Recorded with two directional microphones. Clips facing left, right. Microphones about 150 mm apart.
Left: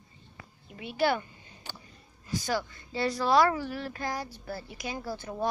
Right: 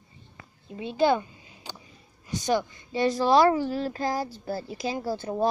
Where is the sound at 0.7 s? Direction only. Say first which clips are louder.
Right 5 dB; 25° right (ahead or behind).